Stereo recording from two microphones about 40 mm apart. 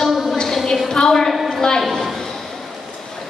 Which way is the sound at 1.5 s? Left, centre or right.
Centre.